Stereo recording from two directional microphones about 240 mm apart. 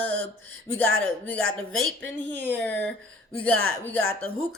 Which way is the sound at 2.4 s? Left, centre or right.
Centre.